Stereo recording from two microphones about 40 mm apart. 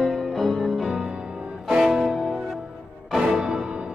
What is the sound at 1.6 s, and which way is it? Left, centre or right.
Music, centre.